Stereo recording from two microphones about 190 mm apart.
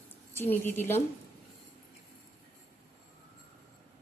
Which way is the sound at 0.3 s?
10° left (ahead or behind).